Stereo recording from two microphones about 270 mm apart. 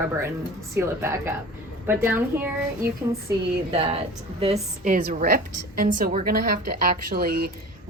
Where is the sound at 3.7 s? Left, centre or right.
Right.